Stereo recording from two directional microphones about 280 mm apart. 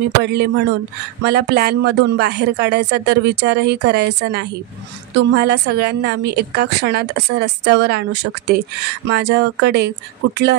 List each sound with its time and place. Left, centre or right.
0.2 s a woman's voice: right